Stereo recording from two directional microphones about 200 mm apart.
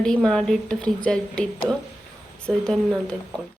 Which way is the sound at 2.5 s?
5° left (ahead or behind).